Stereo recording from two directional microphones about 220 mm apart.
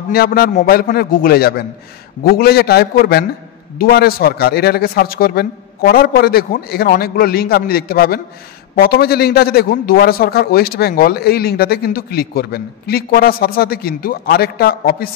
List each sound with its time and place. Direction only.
0.1 s a man's voice: 45° left (ahead or behind)